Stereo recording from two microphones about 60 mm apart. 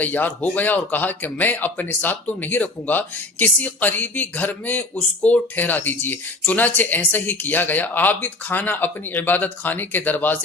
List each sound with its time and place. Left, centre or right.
0.0 s speech: left